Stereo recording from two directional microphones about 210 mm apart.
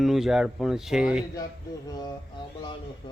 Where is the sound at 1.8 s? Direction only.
15° left (ahead or behind).